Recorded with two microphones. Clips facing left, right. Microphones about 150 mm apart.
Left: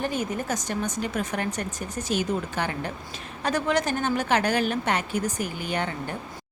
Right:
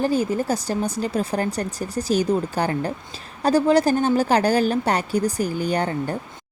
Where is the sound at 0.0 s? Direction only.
35° right (ahead or behind).